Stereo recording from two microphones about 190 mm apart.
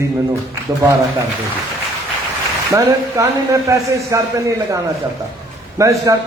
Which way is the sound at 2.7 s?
15° right (ahead or behind).